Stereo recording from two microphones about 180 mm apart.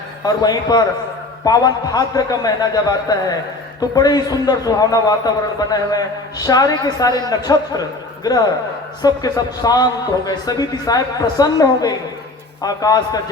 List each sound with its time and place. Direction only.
0.3 s a man's voice: 20° left (ahead or behind)